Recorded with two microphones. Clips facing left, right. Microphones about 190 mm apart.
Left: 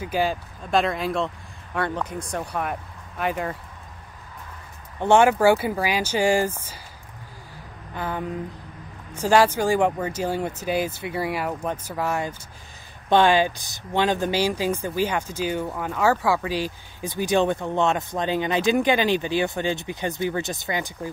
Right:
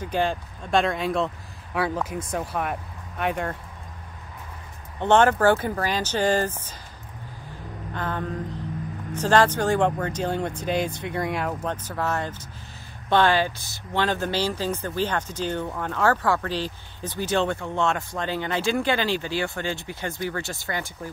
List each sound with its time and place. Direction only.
0.0 s speech: 5° left (ahead or behind)
5.0 s speech: 10° left (ahead or behind)
7.9 s speech: 10° left (ahead or behind)